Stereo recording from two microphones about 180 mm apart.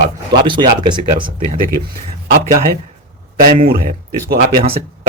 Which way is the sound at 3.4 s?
55° right (ahead or behind).